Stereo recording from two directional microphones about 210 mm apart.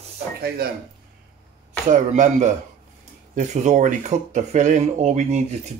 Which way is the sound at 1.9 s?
35° right (ahead or behind).